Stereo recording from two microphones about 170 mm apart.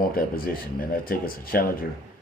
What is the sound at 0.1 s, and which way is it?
Speech, 60° left (ahead or behind).